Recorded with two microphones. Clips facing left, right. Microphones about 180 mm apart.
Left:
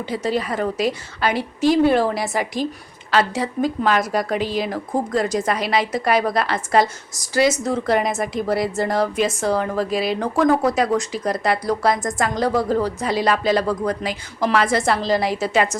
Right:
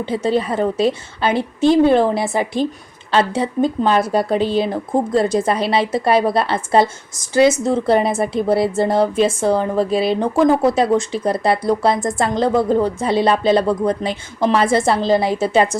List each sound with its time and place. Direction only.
0.0 s speech: 25° right (ahead or behind)